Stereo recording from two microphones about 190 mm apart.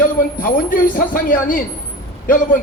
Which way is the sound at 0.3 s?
45° left (ahead or behind).